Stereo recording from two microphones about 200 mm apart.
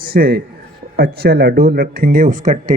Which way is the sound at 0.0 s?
50° right (ahead or behind).